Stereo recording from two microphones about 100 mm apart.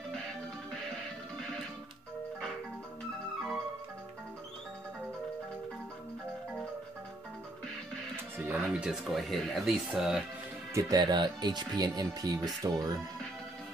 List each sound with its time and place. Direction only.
8.5 s speech: 10° right (ahead or behind)
10.7 s speech: 30° right (ahead or behind)
11.0 s speech: 45° right (ahead or behind)